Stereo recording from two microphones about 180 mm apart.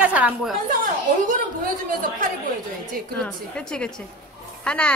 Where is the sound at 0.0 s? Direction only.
5° right (ahead or behind).